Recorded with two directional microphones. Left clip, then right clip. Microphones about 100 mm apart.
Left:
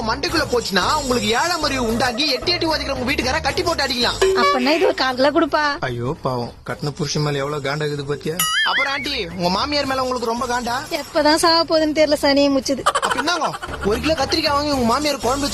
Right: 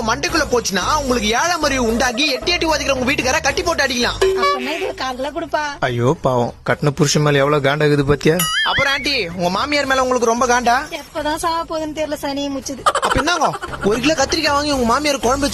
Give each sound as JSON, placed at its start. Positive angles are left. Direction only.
{"t": 0.1, "sound": "speech", "side_deg": -35}
{"t": 4.2, "sound": "speech", "side_deg": 0}
{"t": 5.2, "sound": "speech", "side_deg": 90}
{"t": 6.2, "sound": "speech", "side_deg": -50}
{"t": 7.3, "sound": "speech", "side_deg": -60}
{"t": 8.4, "sound": "speech", "side_deg": 0}
{"t": 8.9, "sound": "speech", "side_deg": -35}
{"t": 10.4, "sound": "speech", "side_deg": -45}
{"t": 11.2, "sound": "a woman's voice", "side_deg": 70}
{"t": 12.8, "sound": "turkey", "side_deg": 0}
{"t": 14.0, "sound": "speech", "side_deg": -25}